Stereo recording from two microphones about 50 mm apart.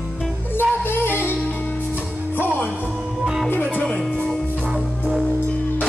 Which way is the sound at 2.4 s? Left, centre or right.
Left.